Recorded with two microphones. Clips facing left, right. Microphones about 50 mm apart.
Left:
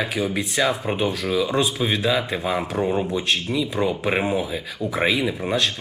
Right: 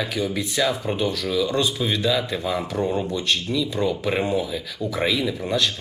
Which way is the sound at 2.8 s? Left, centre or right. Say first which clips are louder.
Left 2 dB; centre.